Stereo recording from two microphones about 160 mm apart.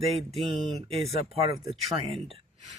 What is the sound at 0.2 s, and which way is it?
Speech, 40° right (ahead or behind).